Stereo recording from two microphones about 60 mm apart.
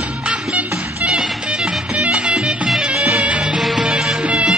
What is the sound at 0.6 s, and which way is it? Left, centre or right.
Music, centre.